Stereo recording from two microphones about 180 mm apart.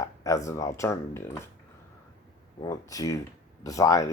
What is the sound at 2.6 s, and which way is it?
Speech, 20° left (ahead or behind).